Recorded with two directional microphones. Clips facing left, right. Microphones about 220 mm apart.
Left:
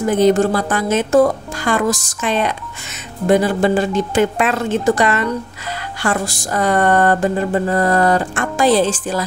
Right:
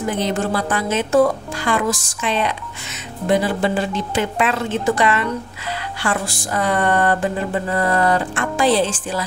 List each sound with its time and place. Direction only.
0.1 s speech: 45° left (ahead or behind)